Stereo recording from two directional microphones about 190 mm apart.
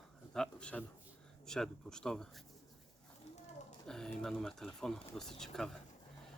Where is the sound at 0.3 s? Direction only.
5° left (ahead or behind).